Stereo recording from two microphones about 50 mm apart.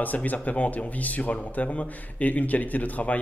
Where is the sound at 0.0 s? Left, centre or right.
Left.